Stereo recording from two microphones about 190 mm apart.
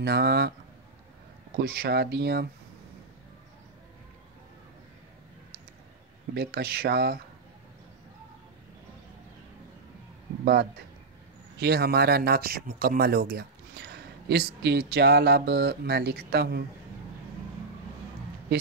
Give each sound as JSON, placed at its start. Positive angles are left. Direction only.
{"t": 0.0, "sound": "speech", "side_deg": -60}
{"t": 1.6, "sound": "speech", "side_deg": -55}
{"t": 6.3, "sound": "speech", "side_deg": -55}
{"t": 10.4, "sound": "speech", "side_deg": -55}